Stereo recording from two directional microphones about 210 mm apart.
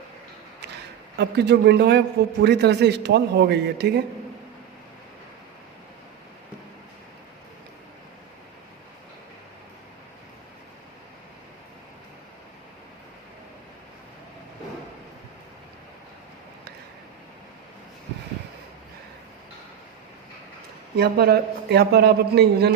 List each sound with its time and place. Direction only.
1.2 s a man's voice: 50° right (ahead or behind)
20.9 s a man's voice: 50° right (ahead or behind)